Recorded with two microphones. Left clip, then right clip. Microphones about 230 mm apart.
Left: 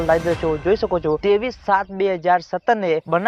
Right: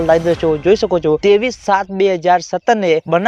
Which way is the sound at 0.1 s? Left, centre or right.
Right.